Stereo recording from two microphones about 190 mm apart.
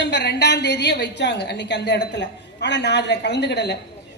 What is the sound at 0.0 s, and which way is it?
A woman's voice, 65° left (ahead or behind).